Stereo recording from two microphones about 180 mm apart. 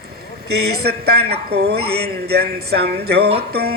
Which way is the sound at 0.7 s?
60° right (ahead or behind).